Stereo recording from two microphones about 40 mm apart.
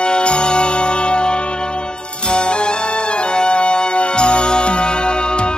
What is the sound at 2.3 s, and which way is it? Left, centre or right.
Music, left.